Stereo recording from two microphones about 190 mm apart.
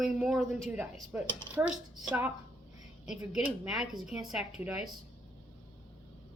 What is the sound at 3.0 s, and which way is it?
Speech, 5° right (ahead or behind).